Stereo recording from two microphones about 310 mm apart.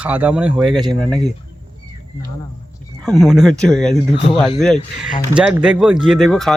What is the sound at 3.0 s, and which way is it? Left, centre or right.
Speech, centre.